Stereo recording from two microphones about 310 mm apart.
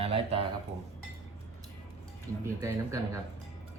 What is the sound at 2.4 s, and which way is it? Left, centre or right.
Speech, centre.